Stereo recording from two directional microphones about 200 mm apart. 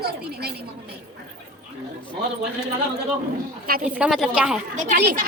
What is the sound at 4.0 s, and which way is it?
Speech, centre (ahead or behind).